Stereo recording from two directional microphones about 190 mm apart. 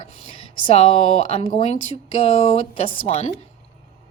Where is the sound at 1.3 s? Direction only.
30° left (ahead or behind).